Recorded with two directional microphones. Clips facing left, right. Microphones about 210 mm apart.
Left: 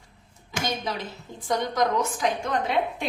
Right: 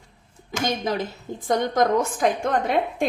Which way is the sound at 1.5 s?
50° right (ahead or behind).